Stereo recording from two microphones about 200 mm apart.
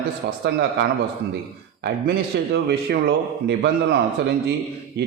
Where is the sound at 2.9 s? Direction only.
50° right (ahead or behind).